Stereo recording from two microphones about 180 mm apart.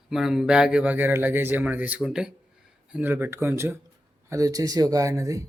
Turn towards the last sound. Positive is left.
turn(degrees=-20)  # may be behind; listen again after turning